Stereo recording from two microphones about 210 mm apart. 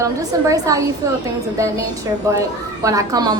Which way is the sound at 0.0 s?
15° right (ahead or behind).